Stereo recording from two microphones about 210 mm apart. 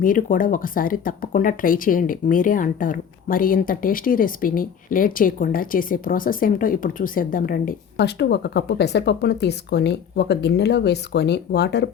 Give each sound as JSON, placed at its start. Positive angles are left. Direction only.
{"t": 0.0, "sound": "speech", "side_deg": 40}